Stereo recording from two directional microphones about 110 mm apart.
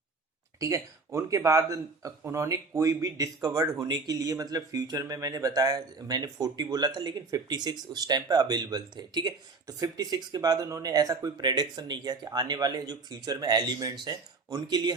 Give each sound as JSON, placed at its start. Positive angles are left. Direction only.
{"t": 0.6, "sound": "speech", "side_deg": -30}